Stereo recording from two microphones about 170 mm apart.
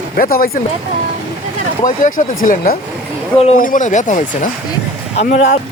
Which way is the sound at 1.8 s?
50° left (ahead or behind).